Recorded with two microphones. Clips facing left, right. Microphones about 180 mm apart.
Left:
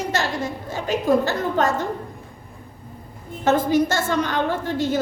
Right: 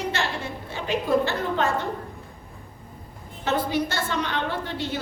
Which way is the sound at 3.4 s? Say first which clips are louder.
Left 6 dB; 45° left (ahead or behind).